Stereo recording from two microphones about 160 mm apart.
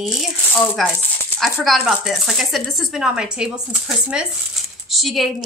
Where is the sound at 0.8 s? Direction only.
Centre (ahead or behind).